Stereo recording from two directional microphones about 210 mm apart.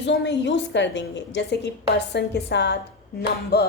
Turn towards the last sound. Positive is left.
turn(degrees=50)  # may be behind; listen again after turning